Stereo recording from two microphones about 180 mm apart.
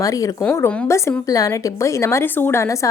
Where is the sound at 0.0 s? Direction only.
20° left (ahead or behind).